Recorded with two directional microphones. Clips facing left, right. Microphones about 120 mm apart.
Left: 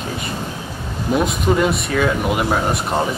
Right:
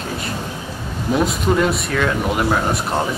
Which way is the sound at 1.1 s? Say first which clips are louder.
Even; centre (ahead or behind).